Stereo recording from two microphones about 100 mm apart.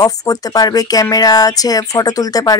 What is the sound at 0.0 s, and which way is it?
Speech, 40° left (ahead or behind).